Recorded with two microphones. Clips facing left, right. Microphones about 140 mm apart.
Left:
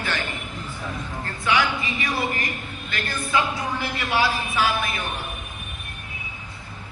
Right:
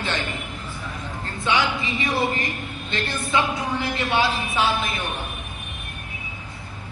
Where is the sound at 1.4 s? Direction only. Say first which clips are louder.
Even; 25° right (ahead or behind).